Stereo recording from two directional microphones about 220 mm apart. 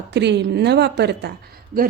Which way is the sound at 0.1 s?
50° right (ahead or behind).